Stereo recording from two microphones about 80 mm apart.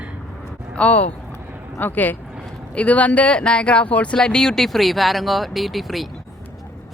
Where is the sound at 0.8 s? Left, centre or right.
Centre.